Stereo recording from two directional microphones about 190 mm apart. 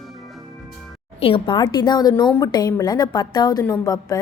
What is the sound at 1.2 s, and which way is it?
A woman's voice, 25° left (ahead or behind).